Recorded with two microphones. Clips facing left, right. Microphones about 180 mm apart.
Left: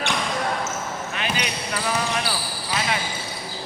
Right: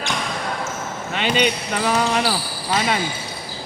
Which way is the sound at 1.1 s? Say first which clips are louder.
Right 10 dB; 70° right (ahead or behind).